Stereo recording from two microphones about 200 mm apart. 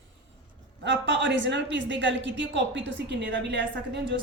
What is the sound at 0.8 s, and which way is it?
A woman's voice, 65° right (ahead or behind).